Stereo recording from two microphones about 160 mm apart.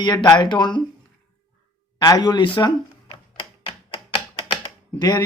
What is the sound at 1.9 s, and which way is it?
Speech, 25° left (ahead or behind).